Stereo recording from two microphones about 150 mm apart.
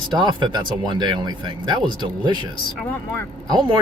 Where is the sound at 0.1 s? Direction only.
30° right (ahead or behind).